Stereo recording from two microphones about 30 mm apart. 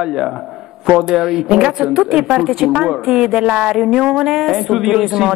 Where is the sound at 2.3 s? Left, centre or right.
Centre.